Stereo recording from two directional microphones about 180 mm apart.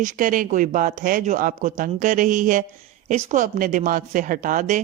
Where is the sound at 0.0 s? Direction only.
45° right (ahead or behind).